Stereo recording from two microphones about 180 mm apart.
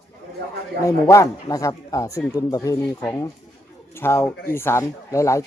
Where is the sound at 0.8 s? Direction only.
15° left (ahead or behind).